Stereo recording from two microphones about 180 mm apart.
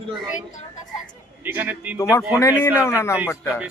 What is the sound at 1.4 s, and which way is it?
Speech, 10° right (ahead or behind).